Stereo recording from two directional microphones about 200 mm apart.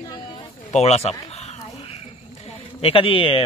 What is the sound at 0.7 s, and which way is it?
Speech, 30° left (ahead or behind).